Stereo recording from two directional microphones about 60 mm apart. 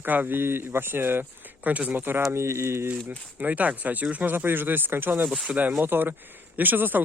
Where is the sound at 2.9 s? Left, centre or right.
Right.